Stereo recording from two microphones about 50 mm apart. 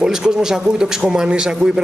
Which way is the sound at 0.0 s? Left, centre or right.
Centre.